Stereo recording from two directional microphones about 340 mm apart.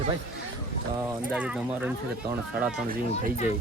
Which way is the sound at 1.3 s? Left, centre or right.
Centre.